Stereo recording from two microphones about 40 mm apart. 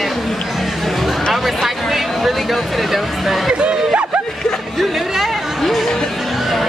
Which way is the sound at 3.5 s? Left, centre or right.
Right.